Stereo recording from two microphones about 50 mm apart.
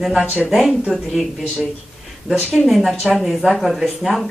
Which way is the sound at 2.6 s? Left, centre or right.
Centre.